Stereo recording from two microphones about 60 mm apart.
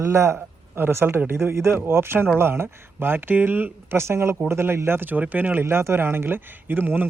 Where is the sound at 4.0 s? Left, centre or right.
Right.